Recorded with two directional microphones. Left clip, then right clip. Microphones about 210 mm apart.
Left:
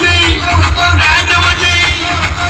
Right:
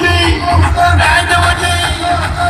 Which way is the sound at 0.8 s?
30° right (ahead or behind).